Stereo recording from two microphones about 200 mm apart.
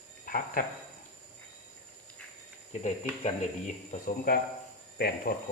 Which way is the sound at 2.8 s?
35° left (ahead or behind).